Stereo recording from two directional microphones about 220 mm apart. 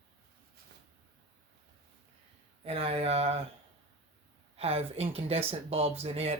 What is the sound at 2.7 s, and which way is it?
Speech, 25° right (ahead or behind).